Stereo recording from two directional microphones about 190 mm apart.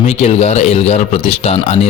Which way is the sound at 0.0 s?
35° left (ahead or behind).